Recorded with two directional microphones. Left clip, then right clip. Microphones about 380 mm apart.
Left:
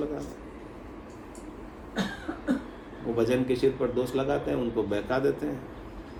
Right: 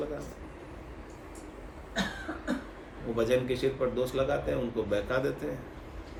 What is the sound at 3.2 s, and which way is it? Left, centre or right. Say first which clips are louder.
A man's voice: left 2 dB; centre.